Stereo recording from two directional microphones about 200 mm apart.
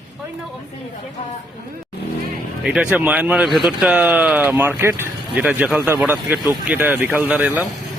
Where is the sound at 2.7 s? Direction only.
5° right (ahead or behind).